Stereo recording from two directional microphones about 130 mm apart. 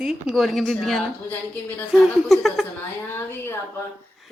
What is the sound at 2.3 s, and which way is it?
Speech, centre (ahead or behind).